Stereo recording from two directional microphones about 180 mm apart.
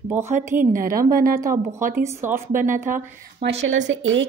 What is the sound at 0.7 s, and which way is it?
Speech, 50° right (ahead or behind).